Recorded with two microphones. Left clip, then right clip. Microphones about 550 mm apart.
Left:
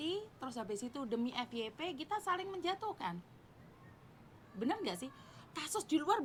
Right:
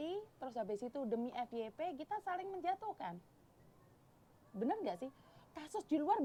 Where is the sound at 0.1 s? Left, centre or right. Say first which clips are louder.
Left 3 dB; right.